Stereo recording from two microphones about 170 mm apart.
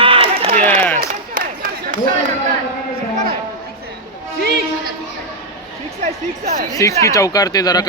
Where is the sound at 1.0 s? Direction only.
60° right (ahead or behind).